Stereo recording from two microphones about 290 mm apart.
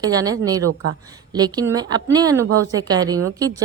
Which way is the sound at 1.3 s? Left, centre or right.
Centre.